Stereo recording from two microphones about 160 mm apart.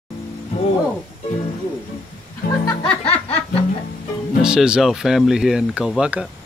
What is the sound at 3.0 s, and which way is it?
Music, 40° left (ahead or behind).